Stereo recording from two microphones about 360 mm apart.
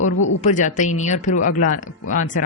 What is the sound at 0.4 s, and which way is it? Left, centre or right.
Speech, centre.